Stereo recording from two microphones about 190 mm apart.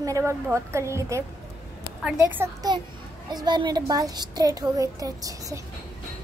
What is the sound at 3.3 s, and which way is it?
A woman's voice, 20° right (ahead or behind).